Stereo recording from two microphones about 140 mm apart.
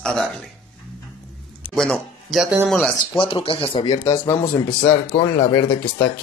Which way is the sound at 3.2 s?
40° left (ahead or behind).